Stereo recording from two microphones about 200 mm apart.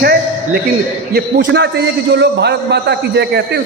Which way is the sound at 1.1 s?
60° right (ahead or behind).